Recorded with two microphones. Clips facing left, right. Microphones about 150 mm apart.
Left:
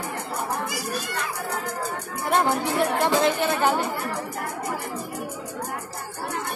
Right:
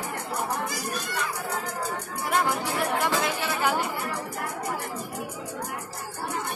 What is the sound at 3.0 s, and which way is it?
Speech, 30° left (ahead or behind).